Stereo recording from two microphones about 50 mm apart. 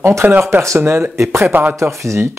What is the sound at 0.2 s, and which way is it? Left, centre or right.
Speech, right.